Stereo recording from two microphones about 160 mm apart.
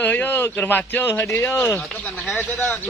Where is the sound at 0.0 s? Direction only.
10° left (ahead or behind).